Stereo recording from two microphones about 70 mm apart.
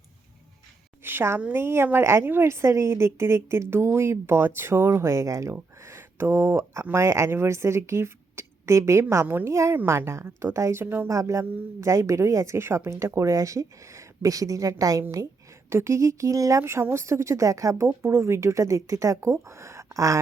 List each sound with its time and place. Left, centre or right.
1.0 s a sound: right
1.5 s a woman's voice: right
5.5 s a sound: right
6.9 s a woman's voice: right
9.2 s a woman's voice: right
9.5 s a woman's voice: right
11.1 s a woman's voice: right
15.7 s speech: right